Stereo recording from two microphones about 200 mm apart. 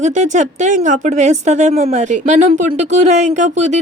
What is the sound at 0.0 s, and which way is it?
Speech, 40° right (ahead or behind).